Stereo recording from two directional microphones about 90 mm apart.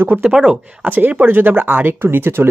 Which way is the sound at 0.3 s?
5° right (ahead or behind).